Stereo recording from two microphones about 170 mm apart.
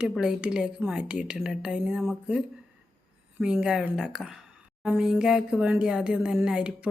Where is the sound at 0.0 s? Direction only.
5° right (ahead or behind).